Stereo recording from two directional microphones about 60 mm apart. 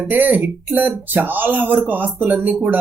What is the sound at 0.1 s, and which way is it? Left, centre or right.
Speech, right.